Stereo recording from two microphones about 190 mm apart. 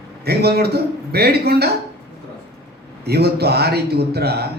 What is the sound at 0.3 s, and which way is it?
A man's voice, 55° right (ahead or behind).